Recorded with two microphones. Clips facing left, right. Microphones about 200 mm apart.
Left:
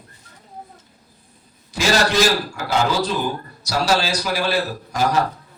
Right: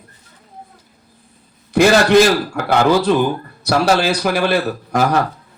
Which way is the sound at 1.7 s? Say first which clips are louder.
Right 8 dB; 60° right (ahead or behind).